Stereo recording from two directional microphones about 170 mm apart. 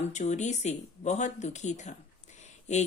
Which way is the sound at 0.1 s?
45° left (ahead or behind).